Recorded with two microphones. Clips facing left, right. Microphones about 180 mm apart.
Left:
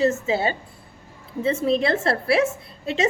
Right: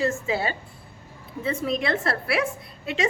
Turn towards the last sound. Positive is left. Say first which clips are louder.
# left 3 dB
turn(degrees=30)  # may be behind; listen again after turning